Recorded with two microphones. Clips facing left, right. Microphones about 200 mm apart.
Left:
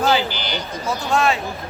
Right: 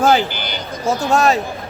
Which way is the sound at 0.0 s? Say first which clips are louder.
Right 4 dB; 45° right (ahead or behind).